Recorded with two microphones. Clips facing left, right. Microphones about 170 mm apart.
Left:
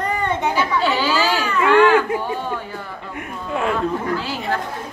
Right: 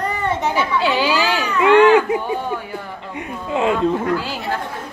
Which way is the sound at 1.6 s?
15° right (ahead or behind).